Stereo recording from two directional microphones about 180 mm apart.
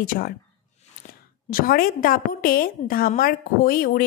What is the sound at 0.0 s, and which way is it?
Speech, 50° left (ahead or behind).